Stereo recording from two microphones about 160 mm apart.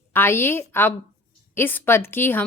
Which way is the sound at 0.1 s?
15° left (ahead or behind).